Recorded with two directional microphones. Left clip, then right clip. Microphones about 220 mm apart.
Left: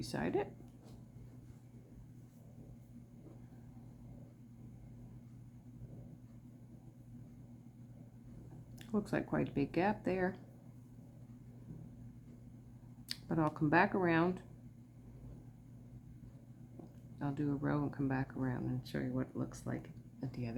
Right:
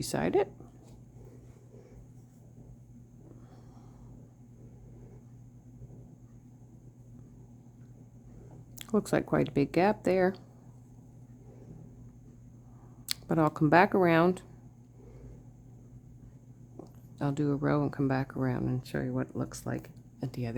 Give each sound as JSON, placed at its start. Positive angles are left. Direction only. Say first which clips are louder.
{"t": 0.0, "sound": "speech", "louder": "right 9 dB", "side_deg": -50}
{"t": 8.8, "sound": "speech", "louder": "right 9 dB", "side_deg": -50}
{"t": 13.1, "sound": "speech", "louder": "right 8 dB", "side_deg": -50}
{"t": 17.2, "sound": "speech", "louder": "right 8 dB", "side_deg": -50}